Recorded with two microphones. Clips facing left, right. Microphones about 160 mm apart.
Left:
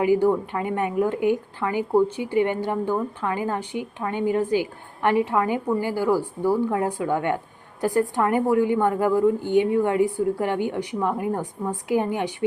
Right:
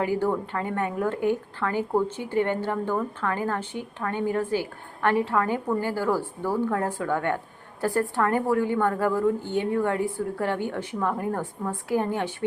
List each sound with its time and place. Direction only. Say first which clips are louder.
0.0 s a woman's voice: left 5 dB; 15° left (ahead or behind)